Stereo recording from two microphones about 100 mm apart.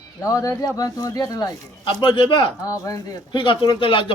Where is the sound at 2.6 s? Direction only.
35° left (ahead or behind).